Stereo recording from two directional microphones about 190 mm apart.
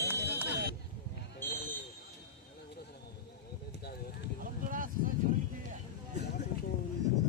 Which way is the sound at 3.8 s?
60° left (ahead or behind).